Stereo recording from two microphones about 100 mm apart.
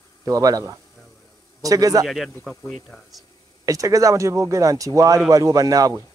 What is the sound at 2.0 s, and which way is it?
Speech, centre (ahead or behind).